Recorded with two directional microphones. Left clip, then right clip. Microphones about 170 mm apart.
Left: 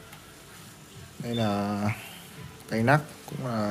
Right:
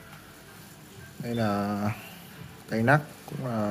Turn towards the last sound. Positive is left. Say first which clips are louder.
# even
turn(degrees=-5)  # may be behind; listen again after turning